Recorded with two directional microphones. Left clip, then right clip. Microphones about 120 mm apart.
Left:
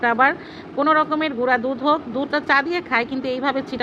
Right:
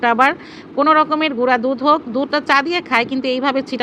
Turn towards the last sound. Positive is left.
turn(degrees=-45)  # may be behind; listen again after turning